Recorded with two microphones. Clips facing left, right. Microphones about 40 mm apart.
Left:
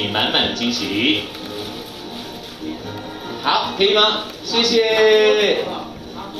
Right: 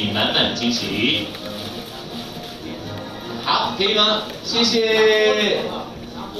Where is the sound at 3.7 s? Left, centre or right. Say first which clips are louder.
Left 3 dB; left.